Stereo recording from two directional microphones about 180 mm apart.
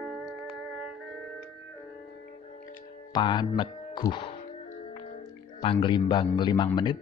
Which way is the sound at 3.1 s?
25° left (ahead or behind).